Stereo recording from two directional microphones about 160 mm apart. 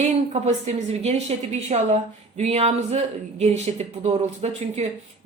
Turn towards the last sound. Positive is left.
turn(degrees=-40)  # may be behind; listen again after turning